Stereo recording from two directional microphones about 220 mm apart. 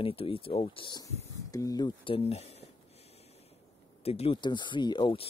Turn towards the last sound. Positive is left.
turn(degrees=25)  # may be behind; listen again after turning